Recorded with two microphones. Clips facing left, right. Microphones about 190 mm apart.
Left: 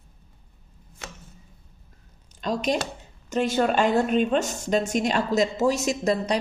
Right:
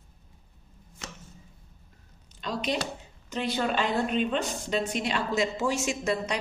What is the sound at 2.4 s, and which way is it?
Speech, 45° left (ahead or behind).